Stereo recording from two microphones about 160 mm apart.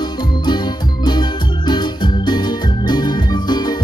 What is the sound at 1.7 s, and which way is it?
Organ, 25° left (ahead or behind).